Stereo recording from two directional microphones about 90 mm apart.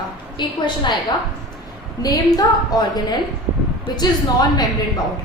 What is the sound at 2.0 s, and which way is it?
A woman's voice, 45° left (ahead or behind).